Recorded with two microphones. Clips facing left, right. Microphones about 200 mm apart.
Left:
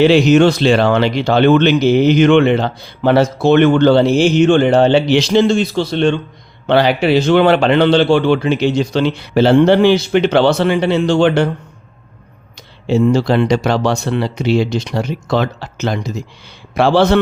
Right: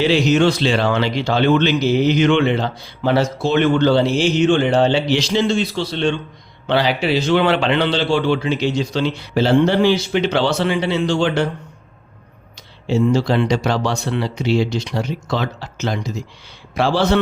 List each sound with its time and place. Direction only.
0.0 s speech: 60° left (ahead or behind)
12.9 s speech: 60° left (ahead or behind)